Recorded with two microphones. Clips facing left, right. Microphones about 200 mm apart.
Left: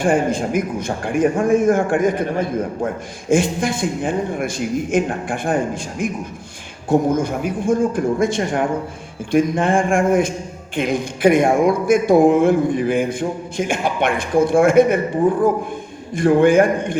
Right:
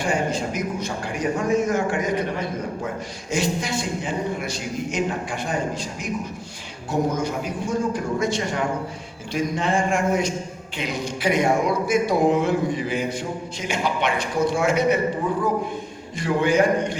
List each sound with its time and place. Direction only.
0.0 s a man's voice: 50° left (ahead or behind)
16.1 s a man's voice: 50° left (ahead or behind)